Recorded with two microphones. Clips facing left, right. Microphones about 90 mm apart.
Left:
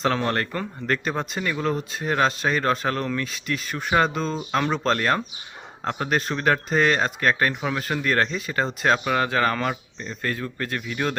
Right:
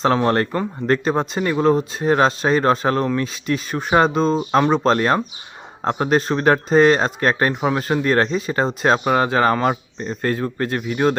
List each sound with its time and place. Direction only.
0.0 s speech: 25° right (ahead or behind)